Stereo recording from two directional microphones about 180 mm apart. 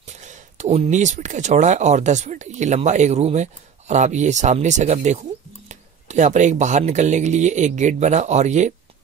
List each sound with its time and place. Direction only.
0.2 s speech: 40° right (ahead or behind)